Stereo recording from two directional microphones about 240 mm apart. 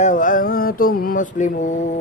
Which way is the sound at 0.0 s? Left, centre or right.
Left.